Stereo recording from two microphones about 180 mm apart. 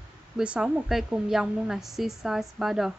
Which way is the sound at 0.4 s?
5° right (ahead or behind).